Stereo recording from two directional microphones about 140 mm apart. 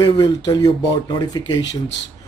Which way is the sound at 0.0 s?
30° left (ahead or behind).